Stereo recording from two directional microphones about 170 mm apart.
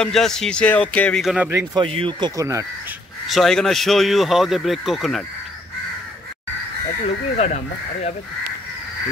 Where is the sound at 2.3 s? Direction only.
20° right (ahead or behind).